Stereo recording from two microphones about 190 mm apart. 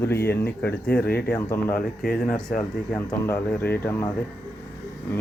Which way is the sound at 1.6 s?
45° left (ahead or behind).